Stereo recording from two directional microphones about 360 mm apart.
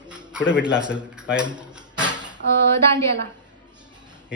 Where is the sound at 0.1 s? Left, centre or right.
Centre.